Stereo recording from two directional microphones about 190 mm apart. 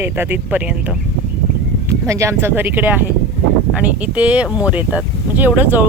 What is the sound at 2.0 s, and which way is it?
Speech, 15° right (ahead or behind).